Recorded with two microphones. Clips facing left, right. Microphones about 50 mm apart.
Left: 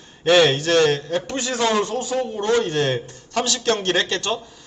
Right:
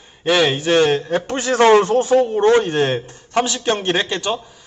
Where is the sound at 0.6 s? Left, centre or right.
Right.